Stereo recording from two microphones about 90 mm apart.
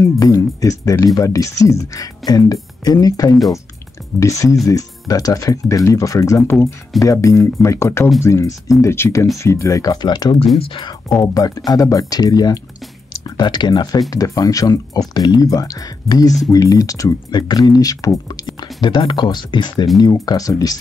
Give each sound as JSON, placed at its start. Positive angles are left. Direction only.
{"t": 0.0, "sound": "speech", "side_deg": 40}
{"t": 10.0, "sound": "speech", "side_deg": 50}
{"t": 10.6, "sound": "speech", "side_deg": 75}
{"t": 11.3, "sound": "speech", "side_deg": 45}
{"t": 14.1, "sound": "speech", "side_deg": 40}
{"t": 17.3, "sound": "speech", "side_deg": 50}
{"t": 18.9, "sound": "speech", "side_deg": 60}
{"t": 20.0, "sound": "speech", "side_deg": 45}